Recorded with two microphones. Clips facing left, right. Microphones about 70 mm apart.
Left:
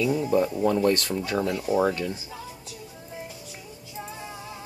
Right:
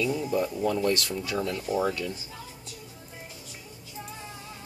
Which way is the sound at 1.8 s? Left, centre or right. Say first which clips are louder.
Left 4 dB; left.